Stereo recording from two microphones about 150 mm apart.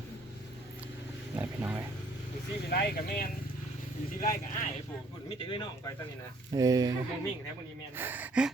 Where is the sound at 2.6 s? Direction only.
90° left.